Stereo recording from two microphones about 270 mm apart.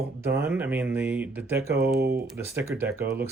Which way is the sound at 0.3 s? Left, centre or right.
Centre.